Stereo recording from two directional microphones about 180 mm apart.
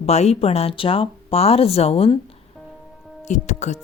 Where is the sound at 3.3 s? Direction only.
40° left (ahead or behind).